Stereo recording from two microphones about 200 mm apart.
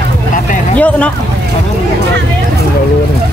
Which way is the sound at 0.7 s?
5° left (ahead or behind).